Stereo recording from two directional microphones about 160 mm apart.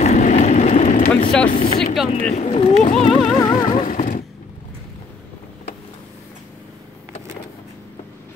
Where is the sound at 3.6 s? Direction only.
45° left (ahead or behind).